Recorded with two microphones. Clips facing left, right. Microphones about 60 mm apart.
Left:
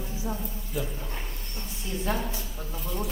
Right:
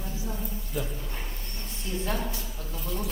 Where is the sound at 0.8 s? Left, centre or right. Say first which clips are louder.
Left 1 dB; centre.